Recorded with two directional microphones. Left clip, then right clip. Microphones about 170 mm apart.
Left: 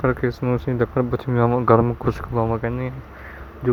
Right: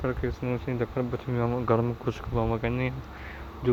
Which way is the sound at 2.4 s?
25° left (ahead or behind).